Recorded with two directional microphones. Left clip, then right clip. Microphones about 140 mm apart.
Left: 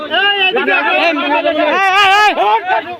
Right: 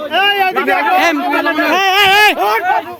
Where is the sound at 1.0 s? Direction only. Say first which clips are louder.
Even; 70° right (ahead or behind); by 2.4 s 90° right.